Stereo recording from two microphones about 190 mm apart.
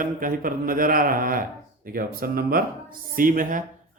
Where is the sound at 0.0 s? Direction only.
45° right (ahead or behind).